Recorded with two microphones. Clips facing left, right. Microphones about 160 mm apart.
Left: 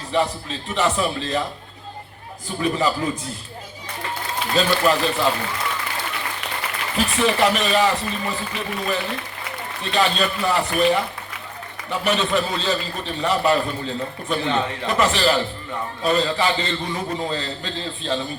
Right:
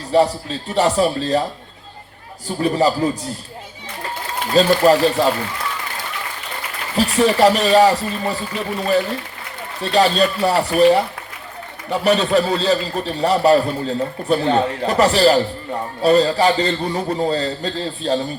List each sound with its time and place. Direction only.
0.1 s a man's voice: 35° right (ahead or behind)
2.6 s a man's voice: 35° right (ahead or behind)
4.5 s a man's voice: 35° right (ahead or behind)
6.9 s a man's voice: 35° right (ahead or behind)
9.8 s a man's voice: 35° right (ahead or behind)